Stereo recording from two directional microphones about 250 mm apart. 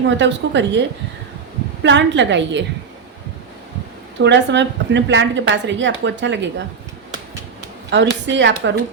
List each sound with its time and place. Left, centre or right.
0.2 s speech: right
4.2 s speech: right
7.9 s speech: right